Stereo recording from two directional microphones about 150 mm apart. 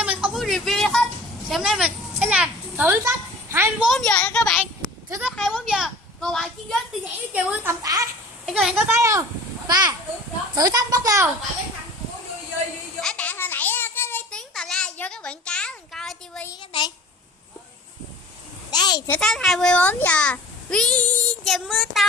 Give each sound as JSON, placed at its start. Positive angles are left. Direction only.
{"t": 0.0, "sound": "a sound", "side_deg": -5}
{"t": 1.5, "sound": "a child's voice", "side_deg": 0}
{"t": 3.8, "sound": "a child's voice", "side_deg": 0}
{"t": 7.0, "sound": "speech", "side_deg": -10}
{"t": 8.4, "sound": "a child's voice", "side_deg": 0}
{"t": 9.0, "sound": "a child's voice", "side_deg": -20}
{"t": 13.0, "sound": "child singing", "side_deg": 5}
{"t": 16.5, "sound": "a child's voice", "side_deg": 30}
{"t": 18.7, "sound": "a child's voice", "side_deg": 30}
{"t": 19.2, "sound": "a child's voice", "side_deg": 0}